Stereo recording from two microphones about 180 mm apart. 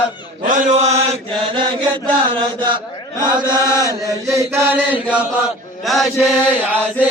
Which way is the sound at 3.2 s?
25° right (ahead or behind).